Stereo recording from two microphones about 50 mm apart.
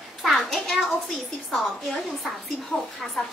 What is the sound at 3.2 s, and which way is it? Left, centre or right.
Speech, centre.